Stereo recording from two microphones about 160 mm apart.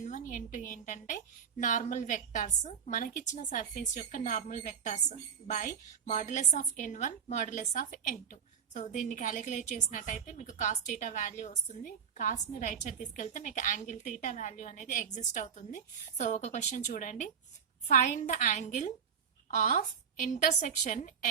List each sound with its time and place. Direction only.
0.0 s a woman's voice: 55° left (ahead or behind)